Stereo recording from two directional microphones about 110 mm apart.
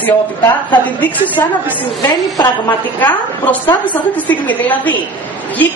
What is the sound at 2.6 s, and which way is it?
A woman's voice, 15° left (ahead or behind).